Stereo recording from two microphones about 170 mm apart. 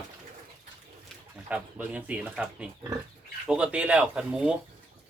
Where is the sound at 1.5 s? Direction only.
10° right (ahead or behind).